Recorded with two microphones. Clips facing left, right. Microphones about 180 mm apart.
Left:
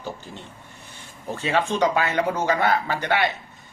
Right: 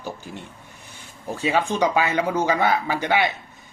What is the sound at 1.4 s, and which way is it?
Speech, 10° right (ahead or behind).